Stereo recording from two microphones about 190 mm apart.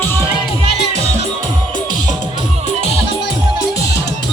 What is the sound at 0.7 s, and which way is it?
Music, 60° left (ahead or behind).